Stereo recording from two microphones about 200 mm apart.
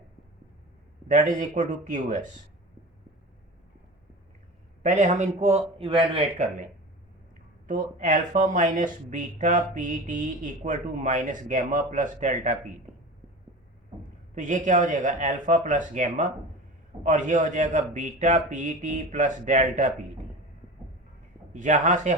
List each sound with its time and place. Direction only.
1.0 s speech: 40° right (ahead or behind)
4.8 s speech: 35° right (ahead or behind)
7.7 s speech: 40° right (ahead or behind)
14.3 s speech: 40° right (ahead or behind)
21.5 s speech: 40° right (ahead or behind)